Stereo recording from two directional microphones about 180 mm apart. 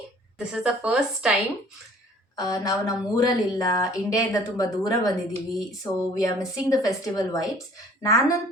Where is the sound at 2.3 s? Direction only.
20° left (ahead or behind).